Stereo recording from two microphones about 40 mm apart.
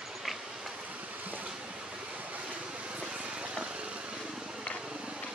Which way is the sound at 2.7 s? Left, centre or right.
Right.